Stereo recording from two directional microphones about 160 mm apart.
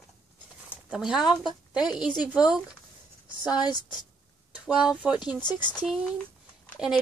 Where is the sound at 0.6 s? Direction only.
5° right (ahead or behind).